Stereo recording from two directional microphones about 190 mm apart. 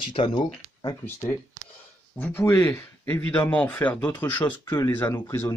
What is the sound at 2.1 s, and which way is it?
Speech, 10° left (ahead or behind).